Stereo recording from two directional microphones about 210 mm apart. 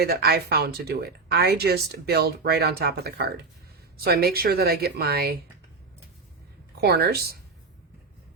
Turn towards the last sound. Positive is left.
turn(degrees=-50)  # may be behind; listen again after turning